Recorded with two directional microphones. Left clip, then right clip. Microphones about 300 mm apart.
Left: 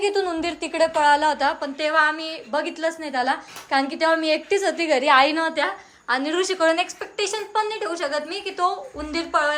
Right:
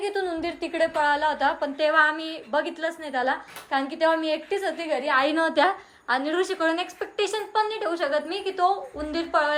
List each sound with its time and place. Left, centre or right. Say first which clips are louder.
0.0 s a woman's voice: left 5 dB; centre